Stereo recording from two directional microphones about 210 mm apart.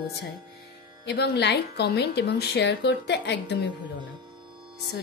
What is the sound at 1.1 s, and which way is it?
A woman's voice, 55° left (ahead or behind).